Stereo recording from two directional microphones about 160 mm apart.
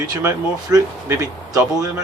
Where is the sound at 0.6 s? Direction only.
20° right (ahead or behind).